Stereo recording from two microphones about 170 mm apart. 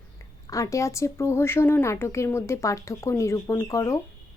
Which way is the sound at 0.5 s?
20° left (ahead or behind).